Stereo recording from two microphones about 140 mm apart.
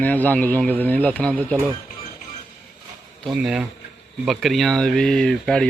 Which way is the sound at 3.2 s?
Centre (ahead or behind).